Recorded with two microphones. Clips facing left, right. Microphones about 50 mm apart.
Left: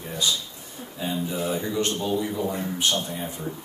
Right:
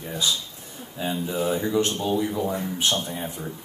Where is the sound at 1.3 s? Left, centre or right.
Right.